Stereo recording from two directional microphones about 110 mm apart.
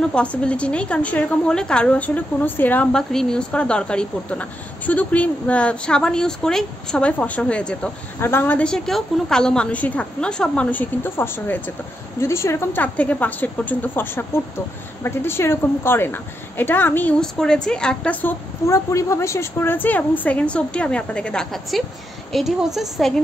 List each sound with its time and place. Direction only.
0.0 s a woman's voice: 10° left (ahead or behind)
8.2 s a woman's voice: 20° left (ahead or behind)
12.8 s a woman's voice: 15° left (ahead or behind)
17.2 s a woman's voice: 5° left (ahead or behind)
18.7 s a woman's voice: 25° left (ahead or behind); by 23.2 s centre (ahead or behind)